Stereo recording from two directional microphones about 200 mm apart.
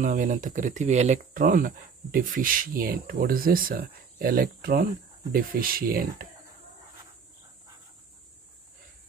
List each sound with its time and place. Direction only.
0.0 s speech: 40° right (ahead or behind)